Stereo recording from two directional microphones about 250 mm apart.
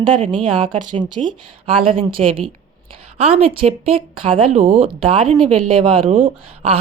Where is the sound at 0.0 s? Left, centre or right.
Centre.